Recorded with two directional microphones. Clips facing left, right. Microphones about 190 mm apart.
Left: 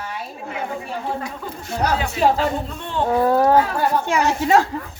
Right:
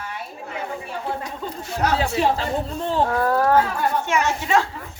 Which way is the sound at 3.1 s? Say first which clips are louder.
Left 7 dB; 20° left (ahead or behind).